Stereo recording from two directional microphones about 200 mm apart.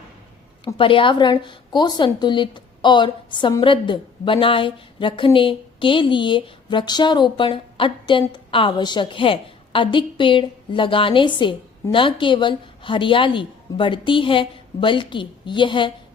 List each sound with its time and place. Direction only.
0.6 s a woman's voice: 25° left (ahead or behind)